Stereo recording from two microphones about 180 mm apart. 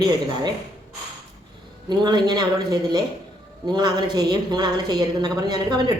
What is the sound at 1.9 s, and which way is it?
A woman's voice, 25° right (ahead or behind).